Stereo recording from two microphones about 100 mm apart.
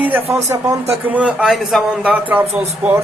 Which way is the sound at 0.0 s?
20° right (ahead or behind).